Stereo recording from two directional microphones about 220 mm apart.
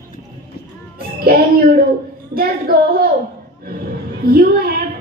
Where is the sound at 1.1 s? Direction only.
45° right (ahead or behind).